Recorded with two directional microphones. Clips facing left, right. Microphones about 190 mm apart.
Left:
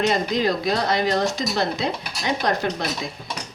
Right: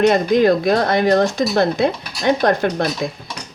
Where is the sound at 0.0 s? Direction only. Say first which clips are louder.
Right 8 dB; 55° right (ahead or behind).